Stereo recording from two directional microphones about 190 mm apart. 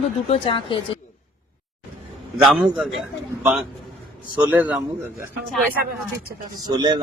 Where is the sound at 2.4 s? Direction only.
5° right (ahead or behind).